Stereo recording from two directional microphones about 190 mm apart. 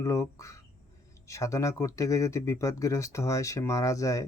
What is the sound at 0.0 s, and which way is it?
Speech, 15° left (ahead or behind).